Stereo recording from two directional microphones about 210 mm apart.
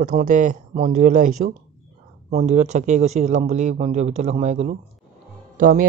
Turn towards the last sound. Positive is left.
turn(degrees=-40)  # may be behind; listen again after turning